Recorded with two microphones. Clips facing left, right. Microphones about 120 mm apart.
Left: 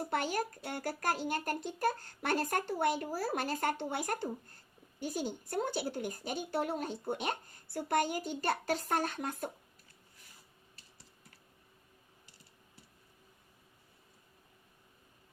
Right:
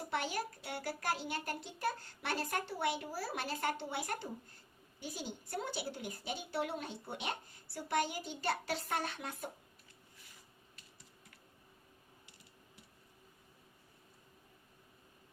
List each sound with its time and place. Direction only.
0.0 s speech: 45° left (ahead or behind)